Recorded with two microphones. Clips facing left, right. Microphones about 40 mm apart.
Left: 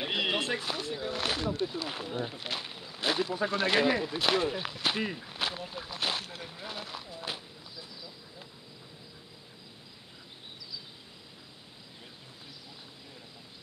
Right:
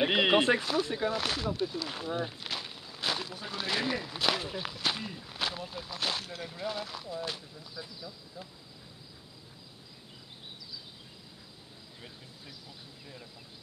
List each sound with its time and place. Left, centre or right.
0.0 s a sound: right
1.0 s speech: centre
2.4 s a sound: centre
3.4 s speech: centre
5.0 s speech: left
5.3 s speech: centre